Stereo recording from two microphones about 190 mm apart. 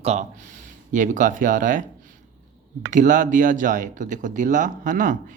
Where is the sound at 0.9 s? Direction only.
40° right (ahead or behind).